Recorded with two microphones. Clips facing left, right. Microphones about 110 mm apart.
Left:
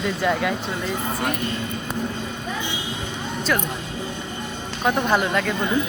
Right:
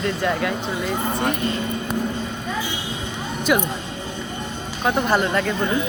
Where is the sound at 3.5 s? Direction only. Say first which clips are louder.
Right 4 dB; 10° right (ahead or behind).